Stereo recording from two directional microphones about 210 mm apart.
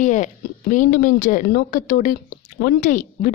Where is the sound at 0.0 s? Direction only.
35° left (ahead or behind).